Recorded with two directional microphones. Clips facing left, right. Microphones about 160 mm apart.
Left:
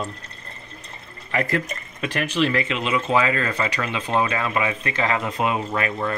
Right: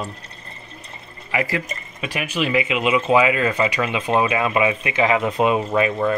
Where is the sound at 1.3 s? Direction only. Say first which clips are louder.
Even; 5° right (ahead or behind).